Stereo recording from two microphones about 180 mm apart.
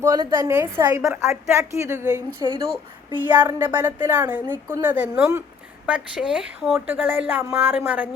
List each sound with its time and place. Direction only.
0.0 s a woman's voice: 20° right (ahead or behind)
3.2 s a woman's voice: 10° right (ahead or behind)